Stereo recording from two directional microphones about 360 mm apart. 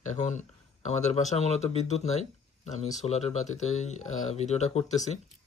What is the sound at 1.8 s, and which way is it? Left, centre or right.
Speech, centre.